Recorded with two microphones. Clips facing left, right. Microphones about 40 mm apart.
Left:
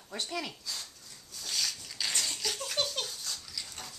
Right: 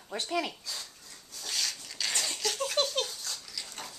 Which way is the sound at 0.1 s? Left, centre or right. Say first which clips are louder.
Right 5 dB; centre.